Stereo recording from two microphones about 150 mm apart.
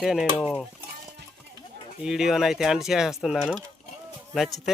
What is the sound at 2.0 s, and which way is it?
Speech, 5° right (ahead or behind).